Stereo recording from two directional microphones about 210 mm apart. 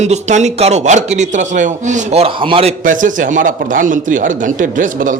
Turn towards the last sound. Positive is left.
turn(degrees=-40)  # may be behind; listen again after turning